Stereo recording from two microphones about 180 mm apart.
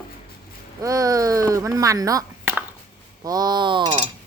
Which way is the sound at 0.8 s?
20° right (ahead or behind).